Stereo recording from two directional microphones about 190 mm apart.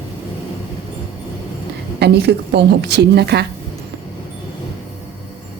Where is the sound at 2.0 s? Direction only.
60° right (ahead or behind).